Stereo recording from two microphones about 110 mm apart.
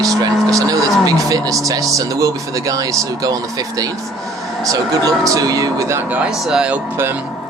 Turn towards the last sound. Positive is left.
turn(degrees=-5)  # may be behind; listen again after turning